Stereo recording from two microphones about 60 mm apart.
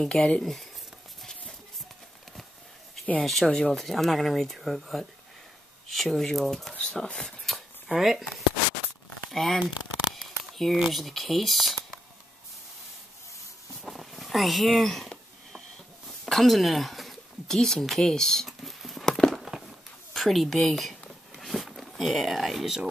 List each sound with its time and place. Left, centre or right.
0.0 s speech: centre
1.2 s a sound: centre
3.3 s speech: centre
3.8 s speech: centre
6.7 s speech: centre
7.5 s shuffling cards: centre
9.3 s speech: centre
10.1 s a sound: centre
10.8 s speech: centre
13.8 s a sound: centre
20.2 s speech: centre
21.4 s vehicle: centre